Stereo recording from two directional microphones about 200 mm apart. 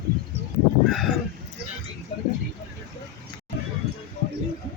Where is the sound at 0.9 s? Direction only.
Centre (ahead or behind).